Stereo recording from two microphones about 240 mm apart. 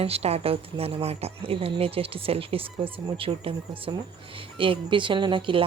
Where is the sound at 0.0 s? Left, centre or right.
Right.